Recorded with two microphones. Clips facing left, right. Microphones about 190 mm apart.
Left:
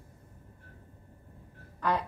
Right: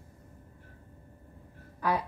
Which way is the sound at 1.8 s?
10° right (ahead or behind).